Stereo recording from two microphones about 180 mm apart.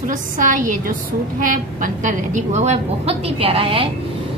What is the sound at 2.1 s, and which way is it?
A woman's voice, 40° right (ahead or behind).